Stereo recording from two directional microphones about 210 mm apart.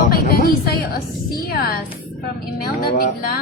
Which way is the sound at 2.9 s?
45° left (ahead or behind).